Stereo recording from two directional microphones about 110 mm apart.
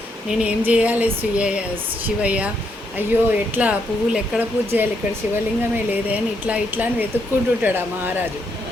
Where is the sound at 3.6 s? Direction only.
10° right (ahead or behind).